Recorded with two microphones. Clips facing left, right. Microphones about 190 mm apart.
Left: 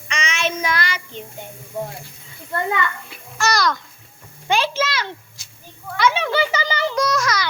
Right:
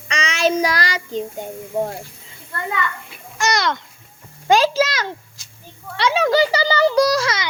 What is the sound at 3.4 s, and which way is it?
Speech, 25° right (ahead or behind).